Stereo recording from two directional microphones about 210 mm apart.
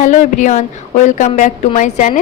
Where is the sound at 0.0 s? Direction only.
35° left (ahead or behind).